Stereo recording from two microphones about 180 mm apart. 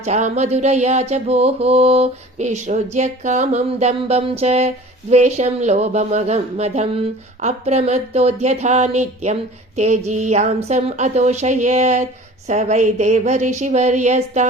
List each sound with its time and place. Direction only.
0.0 s mantra: 40° right (ahead or behind)